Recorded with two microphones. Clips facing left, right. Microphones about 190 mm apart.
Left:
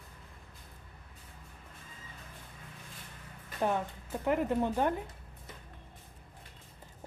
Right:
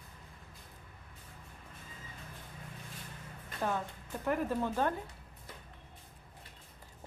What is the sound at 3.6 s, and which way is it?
A woman's voice, 20° left (ahead or behind).